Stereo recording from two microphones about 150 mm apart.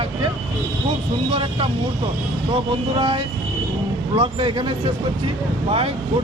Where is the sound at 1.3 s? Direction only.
35° right (ahead or behind).